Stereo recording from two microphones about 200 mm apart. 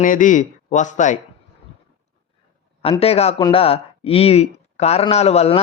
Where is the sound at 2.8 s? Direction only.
30° left (ahead or behind).